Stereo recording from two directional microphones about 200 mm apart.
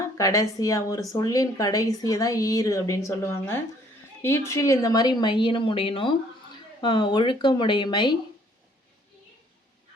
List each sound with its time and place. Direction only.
0.0 s a woman's voice: 15° left (ahead or behind)